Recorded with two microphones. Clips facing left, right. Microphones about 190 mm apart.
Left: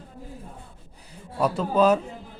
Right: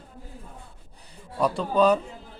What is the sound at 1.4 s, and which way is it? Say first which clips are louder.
Speech: left 1 dB; 5° left (ahead or behind).